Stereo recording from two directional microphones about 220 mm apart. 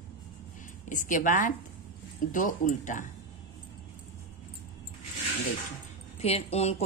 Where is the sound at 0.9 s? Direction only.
35° left (ahead or behind).